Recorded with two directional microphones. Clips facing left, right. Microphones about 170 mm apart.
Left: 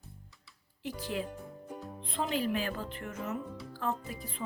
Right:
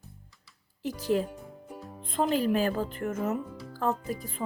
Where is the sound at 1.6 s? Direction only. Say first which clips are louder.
Left 1 dB; 5° right (ahead or behind).